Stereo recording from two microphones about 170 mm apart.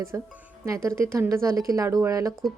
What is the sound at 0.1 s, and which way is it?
Speech, 15° right (ahead or behind).